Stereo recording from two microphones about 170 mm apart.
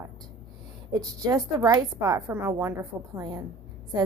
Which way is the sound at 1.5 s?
20° right (ahead or behind).